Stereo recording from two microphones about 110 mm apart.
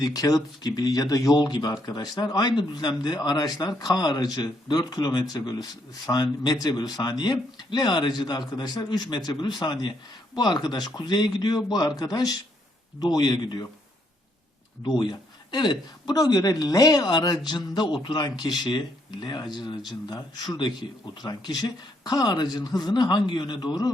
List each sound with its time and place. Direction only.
0.0 s speech: 35° left (ahead or behind)
14.8 s speech: 40° left (ahead or behind)